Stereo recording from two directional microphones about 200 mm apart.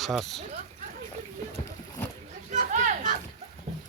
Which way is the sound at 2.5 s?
40° right (ahead or behind).